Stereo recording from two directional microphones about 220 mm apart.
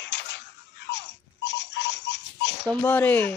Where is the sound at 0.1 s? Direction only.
50° left (ahead or behind).